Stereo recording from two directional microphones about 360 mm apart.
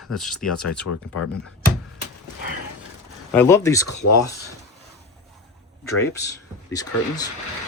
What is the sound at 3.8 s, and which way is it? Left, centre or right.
Speech, left.